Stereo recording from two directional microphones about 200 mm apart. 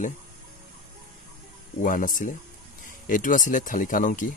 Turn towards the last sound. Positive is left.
turn(degrees=40)  # may be behind; listen again after turning